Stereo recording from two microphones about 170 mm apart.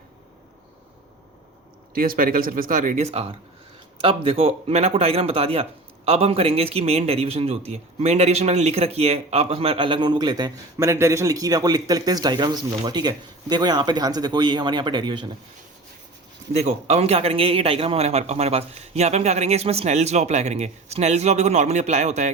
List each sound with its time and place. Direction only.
2.0 s a man's voice: 60° right (ahead or behind); by 15.3 s 25° right (ahead or behind)
16.5 s a man's voice: 40° right (ahead or behind)